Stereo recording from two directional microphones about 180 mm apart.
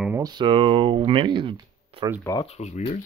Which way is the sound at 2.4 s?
35° left (ahead or behind).